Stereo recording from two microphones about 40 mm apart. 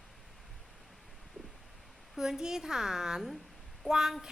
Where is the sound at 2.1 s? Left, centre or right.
Centre.